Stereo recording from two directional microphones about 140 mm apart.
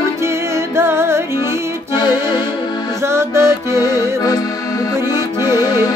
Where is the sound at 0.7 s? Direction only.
20° right (ahead or behind).